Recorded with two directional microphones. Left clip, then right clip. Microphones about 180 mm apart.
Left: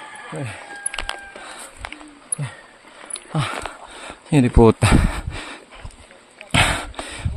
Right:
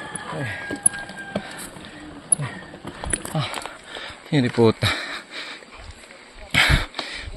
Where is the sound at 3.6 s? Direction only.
30° left (ahead or behind).